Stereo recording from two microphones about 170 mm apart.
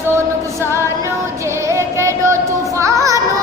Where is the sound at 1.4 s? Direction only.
15° right (ahead or behind).